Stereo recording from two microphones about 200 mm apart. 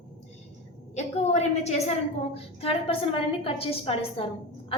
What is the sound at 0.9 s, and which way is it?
A woman's voice, 35° left (ahead or behind).